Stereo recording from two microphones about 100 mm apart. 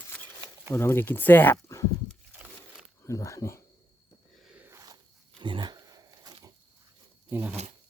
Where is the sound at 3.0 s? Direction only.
30° left (ahead or behind).